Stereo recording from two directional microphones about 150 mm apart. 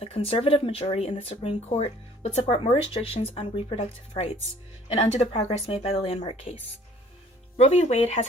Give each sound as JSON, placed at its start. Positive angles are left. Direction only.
{"t": 0.0, "sound": "speech", "side_deg": 40}